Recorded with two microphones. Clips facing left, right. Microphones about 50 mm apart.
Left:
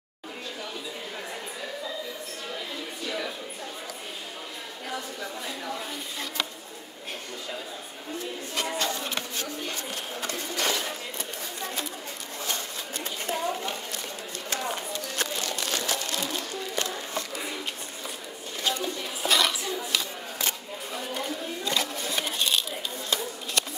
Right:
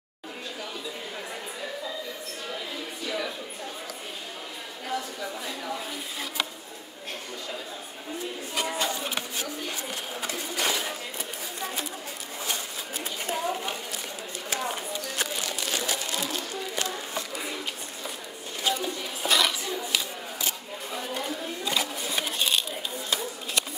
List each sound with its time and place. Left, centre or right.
3.1 s speech: centre
4.8 s speech: centre
8.5 s speech: centre
12.4 s sewing machine: centre
14.5 s a sound: centre
18.6 s a sound: centre